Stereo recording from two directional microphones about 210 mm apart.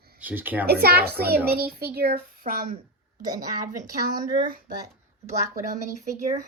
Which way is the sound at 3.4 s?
15° right (ahead or behind).